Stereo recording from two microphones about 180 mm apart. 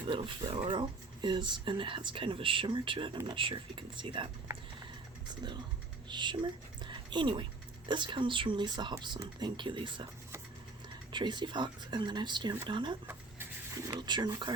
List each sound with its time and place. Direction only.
0.1 s speech: 30° right (ahead or behind)
5.3 s a woman's voice: 25° right (ahead or behind)
11.1 s speech: 25° right (ahead or behind)
13.1 s a sound: 15° right (ahead or behind)
14.0 s speech: 25° right (ahead or behind)